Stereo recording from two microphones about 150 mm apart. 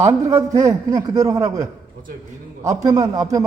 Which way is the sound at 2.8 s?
25° right (ahead or behind).